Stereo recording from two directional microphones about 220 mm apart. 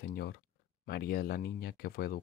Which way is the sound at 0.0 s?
45° left (ahead or behind).